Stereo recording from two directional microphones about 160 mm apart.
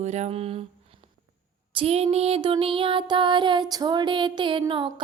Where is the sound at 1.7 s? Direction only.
40° right (ahead or behind).